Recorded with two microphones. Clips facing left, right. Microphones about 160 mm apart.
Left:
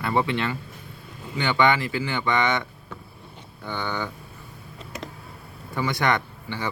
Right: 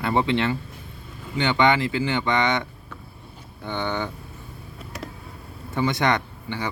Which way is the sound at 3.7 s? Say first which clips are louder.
Right 2 dB; 20° right (ahead or behind).